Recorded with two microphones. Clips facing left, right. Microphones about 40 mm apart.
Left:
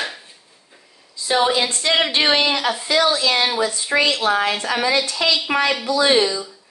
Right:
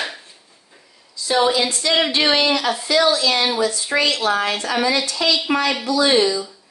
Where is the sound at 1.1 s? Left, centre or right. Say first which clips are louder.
Even; left.